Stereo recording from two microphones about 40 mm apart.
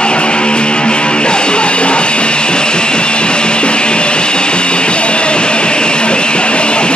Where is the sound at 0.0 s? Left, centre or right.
Left.